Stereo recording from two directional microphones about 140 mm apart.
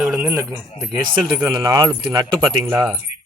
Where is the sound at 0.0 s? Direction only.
10° right (ahead or behind).